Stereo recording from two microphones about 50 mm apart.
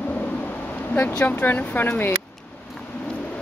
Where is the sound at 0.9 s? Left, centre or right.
Left.